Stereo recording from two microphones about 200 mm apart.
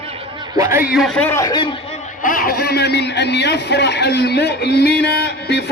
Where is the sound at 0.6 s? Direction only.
15° right (ahead or behind).